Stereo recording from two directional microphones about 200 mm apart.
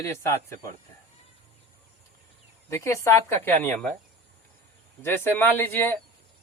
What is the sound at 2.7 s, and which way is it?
A woman's voice, 15° left (ahead or behind).